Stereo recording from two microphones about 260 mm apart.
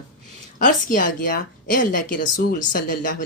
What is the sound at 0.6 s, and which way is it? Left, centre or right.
Speech, left.